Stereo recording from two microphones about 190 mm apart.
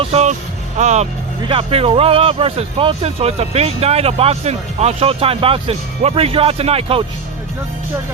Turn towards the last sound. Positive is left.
turn(degrees=-30)  # may be behind; listen again after turning